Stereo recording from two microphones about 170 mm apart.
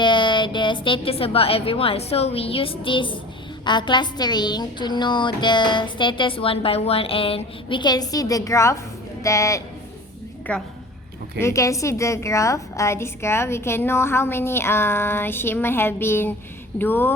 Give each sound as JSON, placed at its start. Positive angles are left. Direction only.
{"t": 0.0, "sound": "a woman's voice", "side_deg": 25}